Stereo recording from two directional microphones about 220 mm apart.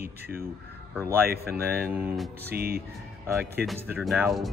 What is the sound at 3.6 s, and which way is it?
Speech, centre (ahead or behind).